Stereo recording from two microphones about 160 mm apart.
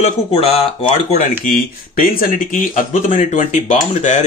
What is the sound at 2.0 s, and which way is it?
Speech, 60° left (ahead or behind).